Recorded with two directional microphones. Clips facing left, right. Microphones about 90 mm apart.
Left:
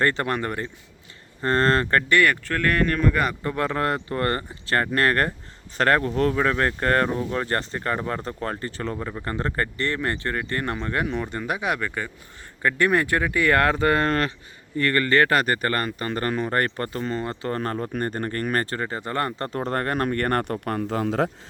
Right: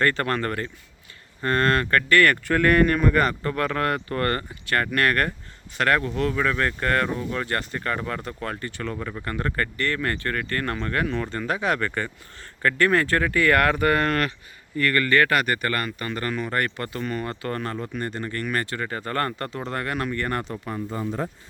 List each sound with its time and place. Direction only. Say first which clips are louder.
0.0 s speech: even; 20° left (ahead or behind)
1.4 s speech: left 1 dB; 30° left (ahead or behind)
2.4 s speech: right 4 dB; 5° right (ahead or behind)
3.4 s speech: even; 20° left (ahead or behind)
9.0 s speech: left 1 dB; 15° left (ahead or behind)
9.2 s speech: left 1 dB; 30° left (ahead or behind)
17.6 s speech: left 3 dB; 35° left (ahead or behind)
18.9 s speech: even; 20° left (ahead or behind)
19.5 s speech: left 4 dB; 40° left (ahead or behind); by 21.2 s 85° left